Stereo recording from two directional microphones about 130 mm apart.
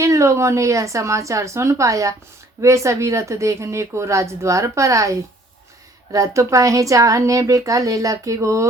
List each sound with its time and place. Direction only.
0.0 s speech: 20° right (ahead or behind)